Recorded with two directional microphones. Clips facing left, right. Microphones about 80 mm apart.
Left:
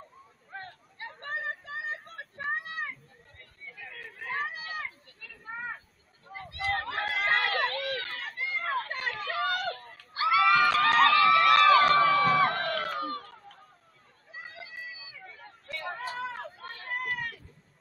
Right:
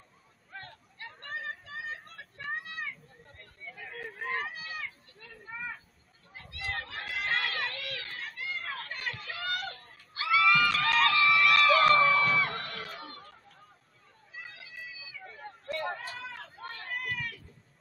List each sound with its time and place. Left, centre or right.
0.5 s hubbub: left
0.9 s a sound: left
2.4 s vehicle: left
2.7 s a sound: left
4.6 s a sound: left
8.5 s children playing: left
8.9 s neigh: left
12.0 s music: left
14.5 s run: left
15.3 s a sound: right
16.1 s chatter: left
16.9 s cat: left